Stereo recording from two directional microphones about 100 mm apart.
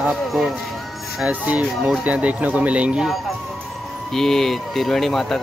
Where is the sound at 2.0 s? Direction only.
15° right (ahead or behind).